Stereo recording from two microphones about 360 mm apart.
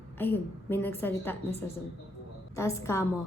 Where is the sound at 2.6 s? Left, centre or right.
Centre.